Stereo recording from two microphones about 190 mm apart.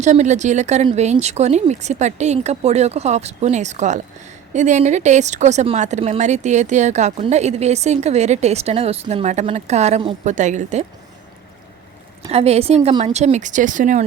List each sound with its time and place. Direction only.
0.0 s speech: 40° right (ahead or behind)
12.3 s speech: 35° right (ahead or behind)